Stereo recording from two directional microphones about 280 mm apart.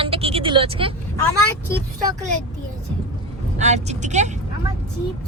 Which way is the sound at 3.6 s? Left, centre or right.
Right.